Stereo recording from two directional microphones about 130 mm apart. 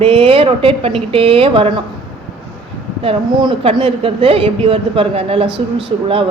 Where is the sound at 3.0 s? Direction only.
45° right (ahead or behind).